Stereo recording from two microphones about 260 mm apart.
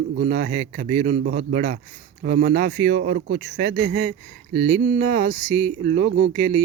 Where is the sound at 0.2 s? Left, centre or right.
Right.